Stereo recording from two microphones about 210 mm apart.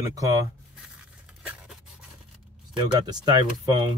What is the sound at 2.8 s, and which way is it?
Speech, 20° right (ahead or behind).